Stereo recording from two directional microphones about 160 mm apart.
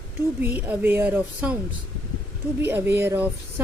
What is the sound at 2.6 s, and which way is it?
Speech, 15° right (ahead or behind).